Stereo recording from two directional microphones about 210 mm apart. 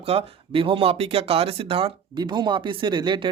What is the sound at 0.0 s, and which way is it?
Speech, 30° right (ahead or behind).